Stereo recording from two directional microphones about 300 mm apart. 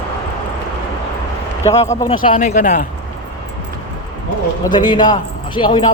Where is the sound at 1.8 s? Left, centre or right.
Centre.